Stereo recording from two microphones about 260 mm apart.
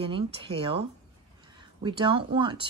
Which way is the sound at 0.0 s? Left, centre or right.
Centre.